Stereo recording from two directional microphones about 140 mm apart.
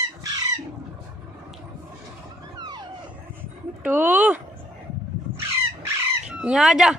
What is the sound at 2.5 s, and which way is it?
Vehicle, 30° right (ahead or behind).